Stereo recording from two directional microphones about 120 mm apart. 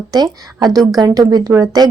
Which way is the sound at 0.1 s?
35° right (ahead or behind).